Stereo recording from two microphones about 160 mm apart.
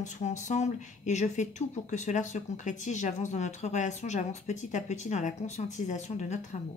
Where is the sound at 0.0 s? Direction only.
50° left (ahead or behind).